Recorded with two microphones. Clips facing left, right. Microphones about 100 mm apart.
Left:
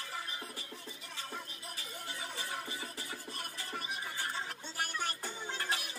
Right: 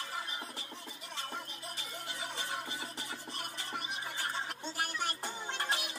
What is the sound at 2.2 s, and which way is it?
Music, 20° right (ahead or behind).